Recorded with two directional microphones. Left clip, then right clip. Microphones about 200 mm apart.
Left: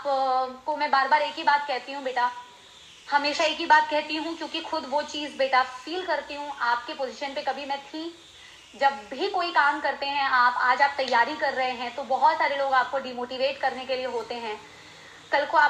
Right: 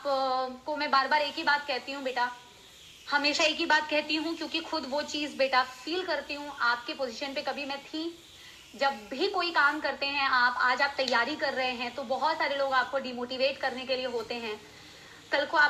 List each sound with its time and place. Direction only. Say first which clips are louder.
0.1 s a woman's voice: left 4 dB; 25° right (ahead or behind)